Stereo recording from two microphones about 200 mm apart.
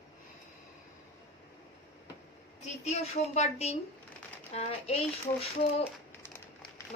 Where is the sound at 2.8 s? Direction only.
35° left (ahead or behind).